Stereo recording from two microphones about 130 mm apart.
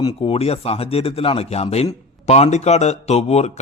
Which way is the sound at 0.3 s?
50° left (ahead or behind).